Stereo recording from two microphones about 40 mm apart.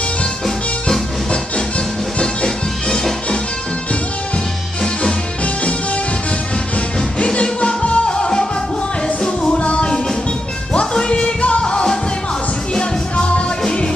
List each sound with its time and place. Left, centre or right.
2.1 s music: centre
7.2 s music: left
13.1 s music: left